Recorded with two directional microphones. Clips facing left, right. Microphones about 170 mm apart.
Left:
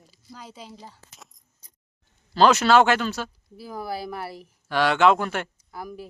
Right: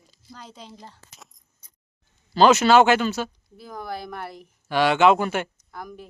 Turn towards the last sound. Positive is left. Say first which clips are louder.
# left 2 dB
turn(degrees=5)  # may be behind; listen again after turning